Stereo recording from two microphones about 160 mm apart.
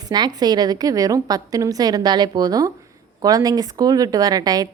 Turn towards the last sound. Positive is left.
turn(degrees=-25)  # may be behind; listen again after turning